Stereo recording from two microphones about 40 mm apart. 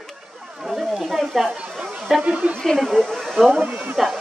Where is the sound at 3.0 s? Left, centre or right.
Centre.